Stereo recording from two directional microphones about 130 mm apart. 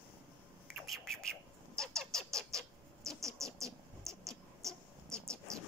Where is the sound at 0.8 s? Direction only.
Centre (ahead or behind).